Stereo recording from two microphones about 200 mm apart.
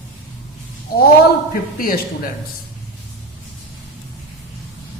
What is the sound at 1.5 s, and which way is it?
Speech, 45° left (ahead or behind).